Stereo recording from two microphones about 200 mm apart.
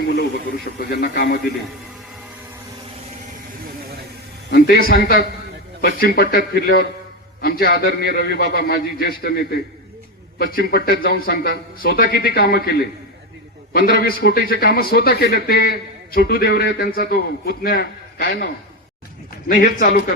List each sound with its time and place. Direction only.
0.0 s a man's voice: 55° left (ahead or behind)
4.5 s a man's voice: 50° left (ahead or behind)
19.5 s a man's voice: 45° left (ahead or behind)